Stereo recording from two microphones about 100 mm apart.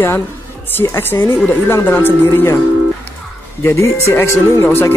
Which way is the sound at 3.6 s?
30° left (ahead or behind).